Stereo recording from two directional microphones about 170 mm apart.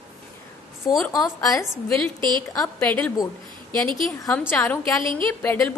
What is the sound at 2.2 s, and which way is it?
Speech, 25° right (ahead or behind).